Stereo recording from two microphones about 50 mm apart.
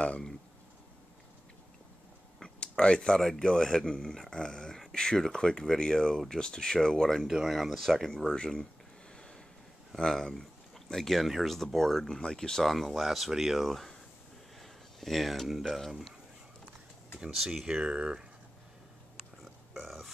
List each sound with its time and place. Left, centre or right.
2.4 s a sound: centre
3.2 s speech: centre
7.2 s speech: centre
9.1 s a sound: centre
9.9 s speech: centre
14.6 s a sound: centre
15.7 s speech: centre
17.4 s speech: centre
19.4 s burping: centre